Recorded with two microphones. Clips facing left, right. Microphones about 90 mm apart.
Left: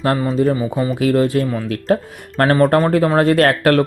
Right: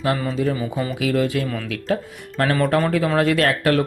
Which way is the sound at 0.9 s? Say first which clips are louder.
Left 5 dB; 40° left (ahead or behind).